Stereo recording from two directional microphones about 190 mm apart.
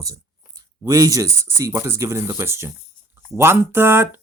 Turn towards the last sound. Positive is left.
turn(degrees=-10)  # may be behind; listen again after turning